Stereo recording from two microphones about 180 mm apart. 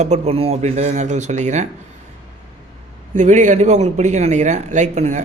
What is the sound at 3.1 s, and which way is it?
Speech, 40° right (ahead or behind).